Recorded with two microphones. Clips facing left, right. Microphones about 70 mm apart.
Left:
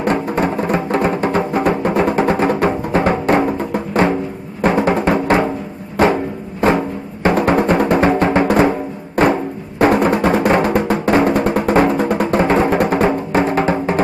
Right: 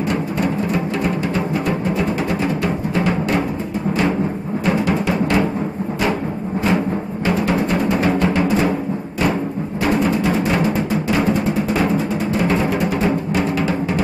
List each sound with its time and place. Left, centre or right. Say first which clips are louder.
0.1 s music: left 5 dB; left
4.6 s music: left 5 dB; left
6.6 s music: left 4 dB; left
8.5 s music: left 4 dB; left
12.4 s music: left 5 dB; left